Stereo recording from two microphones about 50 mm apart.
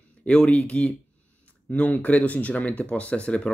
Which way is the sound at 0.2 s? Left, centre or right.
Left.